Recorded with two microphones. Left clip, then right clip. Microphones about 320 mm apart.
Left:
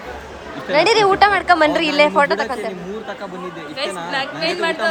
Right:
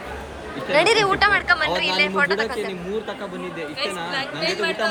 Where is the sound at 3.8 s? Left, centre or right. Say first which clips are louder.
Left 4 dB; left.